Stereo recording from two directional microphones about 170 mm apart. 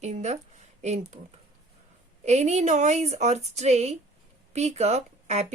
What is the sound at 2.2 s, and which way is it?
A woman's voice, 40° right (ahead or behind).